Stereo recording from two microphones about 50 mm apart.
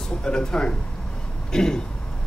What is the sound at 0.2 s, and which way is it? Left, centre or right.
Speech, centre.